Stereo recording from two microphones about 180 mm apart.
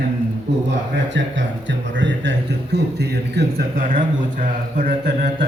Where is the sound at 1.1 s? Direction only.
90° right; by 5.4 s 55° right (ahead or behind).